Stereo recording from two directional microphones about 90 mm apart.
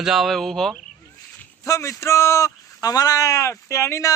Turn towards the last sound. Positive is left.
turn(degrees=35)  # may be behind; listen again after turning